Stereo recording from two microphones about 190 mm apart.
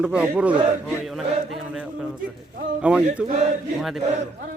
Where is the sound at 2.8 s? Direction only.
5° right (ahead or behind).